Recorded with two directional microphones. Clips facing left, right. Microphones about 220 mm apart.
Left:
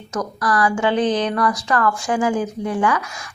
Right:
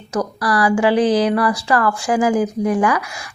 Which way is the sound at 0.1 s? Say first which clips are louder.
Right 2 dB; 35° right (ahead or behind).